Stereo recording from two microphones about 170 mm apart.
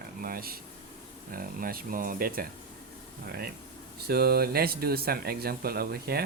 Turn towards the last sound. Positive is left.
turn(degrees=-65)  # may be behind; listen again after turning